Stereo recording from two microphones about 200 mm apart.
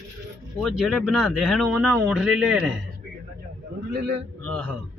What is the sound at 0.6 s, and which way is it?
Speech, centre (ahead or behind).